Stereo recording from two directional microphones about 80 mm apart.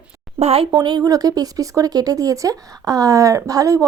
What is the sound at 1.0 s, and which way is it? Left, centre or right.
Speech, right.